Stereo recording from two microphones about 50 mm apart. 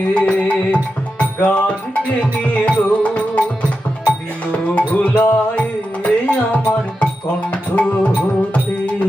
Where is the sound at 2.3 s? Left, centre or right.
Left.